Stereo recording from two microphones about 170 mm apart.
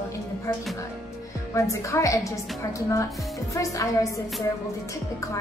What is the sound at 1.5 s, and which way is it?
A woman's voice, 15° left (ahead or behind).